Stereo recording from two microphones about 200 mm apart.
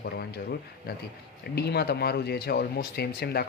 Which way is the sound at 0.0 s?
55° left (ahead or behind).